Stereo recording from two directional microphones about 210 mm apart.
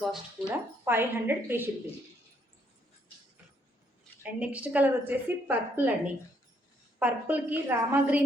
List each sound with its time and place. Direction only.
0.0 s a woman's voice: centre (ahead or behind)
4.2 s a woman's voice: 5° right (ahead or behind)
7.0 s a woman's voice: 10° right (ahead or behind)